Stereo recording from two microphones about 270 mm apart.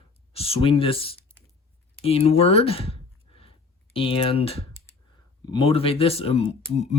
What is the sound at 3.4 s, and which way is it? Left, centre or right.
Clicking, centre.